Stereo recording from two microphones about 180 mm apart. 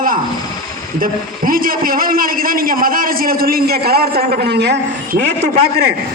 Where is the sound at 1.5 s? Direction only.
50° right (ahead or behind); by 5.2 s 70° right (ahead or behind).